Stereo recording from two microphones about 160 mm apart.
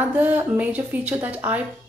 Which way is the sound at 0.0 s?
10° right (ahead or behind).